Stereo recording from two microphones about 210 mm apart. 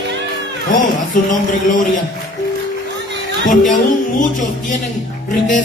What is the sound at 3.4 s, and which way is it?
A man's voice, 40° left (ahead or behind).